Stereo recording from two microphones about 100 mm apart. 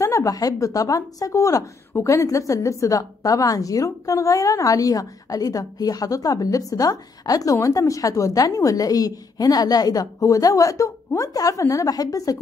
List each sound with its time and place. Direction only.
0.0 s a woman's voice: 35° left (ahead or behind)